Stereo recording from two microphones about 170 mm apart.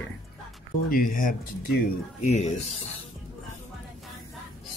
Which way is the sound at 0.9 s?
55° left (ahead or behind).